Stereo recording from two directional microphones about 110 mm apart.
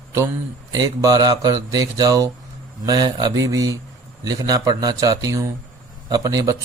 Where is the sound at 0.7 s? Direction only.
35° right (ahead or behind).